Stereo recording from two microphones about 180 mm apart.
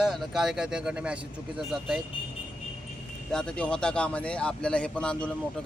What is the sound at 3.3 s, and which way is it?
A man's voice, 5° left (ahead or behind).